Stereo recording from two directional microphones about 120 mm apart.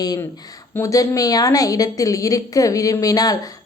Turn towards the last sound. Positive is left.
turn(degrees=30)  # may be behind; listen again after turning